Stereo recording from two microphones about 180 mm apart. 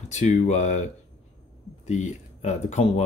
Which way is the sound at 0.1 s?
40° left (ahead or behind).